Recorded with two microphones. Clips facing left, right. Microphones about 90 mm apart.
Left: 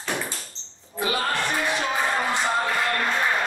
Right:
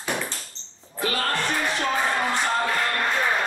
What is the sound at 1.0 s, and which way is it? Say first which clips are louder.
Music: left 1 dB; 15° left (ahead or behind).